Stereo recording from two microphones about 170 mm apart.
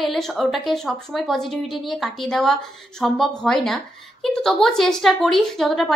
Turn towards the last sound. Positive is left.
turn(degrees=0)  # may be behind; listen again after turning